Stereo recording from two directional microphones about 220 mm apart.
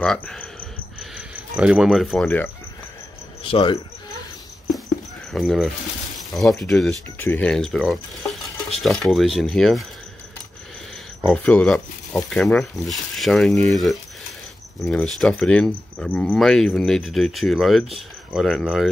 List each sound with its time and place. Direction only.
0.0 s speech: 5° left (ahead or behind)
3.4 s speech: 25° left (ahead or behind)
5.3 s speech: centre (ahead or behind)
11.1 s speech: 5° left (ahead or behind)